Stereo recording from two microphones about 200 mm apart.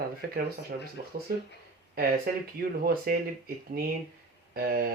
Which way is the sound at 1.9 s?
50° right (ahead or behind).